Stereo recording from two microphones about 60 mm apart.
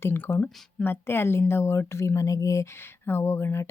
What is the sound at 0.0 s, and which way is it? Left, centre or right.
Speech, left.